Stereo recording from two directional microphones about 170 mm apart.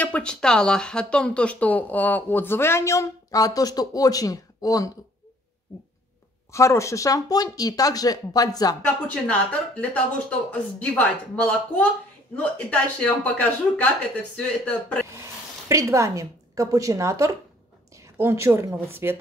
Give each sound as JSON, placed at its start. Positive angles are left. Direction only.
{"t": 0.0, "sound": "speech", "side_deg": 5}
{"t": 6.5, "sound": "speech", "side_deg": 15}
{"t": 8.8, "sound": "speech", "side_deg": 5}
{"t": 15.7, "sound": "a woman's voice", "side_deg": -15}